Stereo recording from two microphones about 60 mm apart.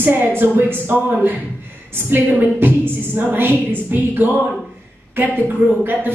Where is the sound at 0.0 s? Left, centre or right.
Right.